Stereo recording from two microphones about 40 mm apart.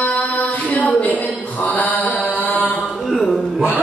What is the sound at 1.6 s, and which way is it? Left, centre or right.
Mantra, left.